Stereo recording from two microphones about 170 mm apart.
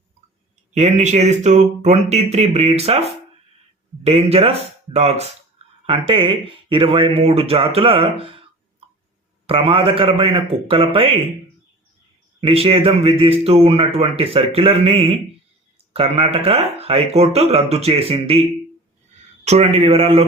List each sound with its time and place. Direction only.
0.7 s speech: 40° right (ahead or behind)
4.0 s speech: 35° right (ahead or behind)
9.5 s speech: 35° right (ahead or behind)
12.4 s speech: 35° right (ahead or behind)
19.5 s speech: 35° right (ahead or behind)